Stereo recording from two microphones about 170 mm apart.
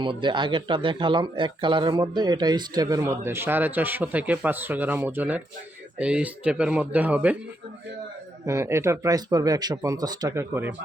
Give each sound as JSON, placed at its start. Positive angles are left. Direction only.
{"t": 0.0, "sound": "speech", "side_deg": -25}
{"t": 8.4, "sound": "speech", "side_deg": -15}